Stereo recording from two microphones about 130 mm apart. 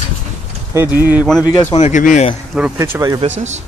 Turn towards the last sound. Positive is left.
turn(degrees=-25)  # may be behind; listen again after turning